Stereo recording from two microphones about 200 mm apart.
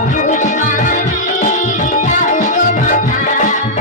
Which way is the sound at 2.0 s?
40° left (ahead or behind).